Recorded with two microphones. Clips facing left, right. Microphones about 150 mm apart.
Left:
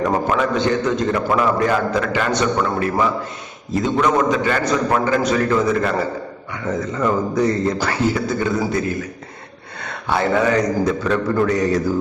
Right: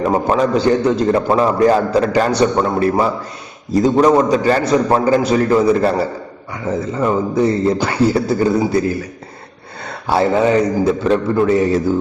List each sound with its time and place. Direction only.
0.0 s a man's voice: 30° right (ahead or behind)